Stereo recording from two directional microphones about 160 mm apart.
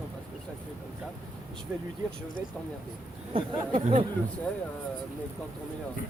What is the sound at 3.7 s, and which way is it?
Speech, 45° right (ahead or behind).